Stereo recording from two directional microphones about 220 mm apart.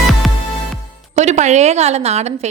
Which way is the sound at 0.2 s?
Centre (ahead or behind).